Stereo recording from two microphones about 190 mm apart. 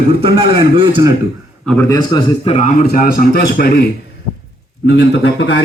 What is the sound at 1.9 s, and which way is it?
Speech, 20° left (ahead or behind).